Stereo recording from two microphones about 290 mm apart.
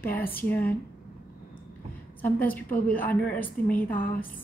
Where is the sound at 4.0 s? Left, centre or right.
Left.